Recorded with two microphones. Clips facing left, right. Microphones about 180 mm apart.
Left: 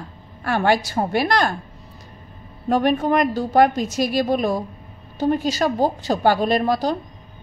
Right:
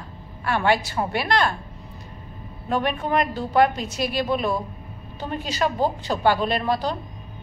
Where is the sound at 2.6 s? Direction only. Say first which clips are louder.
Left 6 dB; 40° left (ahead or behind).